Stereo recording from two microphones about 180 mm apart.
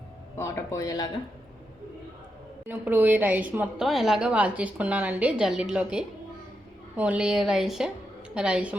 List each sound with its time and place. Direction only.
0.3 s speech: 15° left (ahead or behind)
2.6 s a woman's voice: 10° right (ahead or behind)